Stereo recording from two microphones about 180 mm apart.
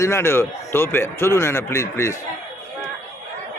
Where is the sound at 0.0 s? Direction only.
15° left (ahead or behind).